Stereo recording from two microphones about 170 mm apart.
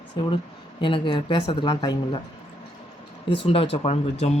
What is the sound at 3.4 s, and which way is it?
Speech, 35° left (ahead or behind).